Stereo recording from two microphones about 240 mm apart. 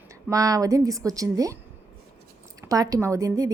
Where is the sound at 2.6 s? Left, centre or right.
Centre.